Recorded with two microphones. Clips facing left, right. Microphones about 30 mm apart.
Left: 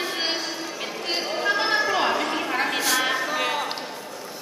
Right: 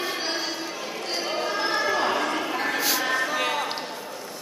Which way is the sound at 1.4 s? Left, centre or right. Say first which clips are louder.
Left 6 dB; left.